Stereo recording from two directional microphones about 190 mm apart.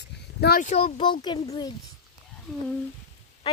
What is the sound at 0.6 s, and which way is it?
Speech, 30° left (ahead or behind).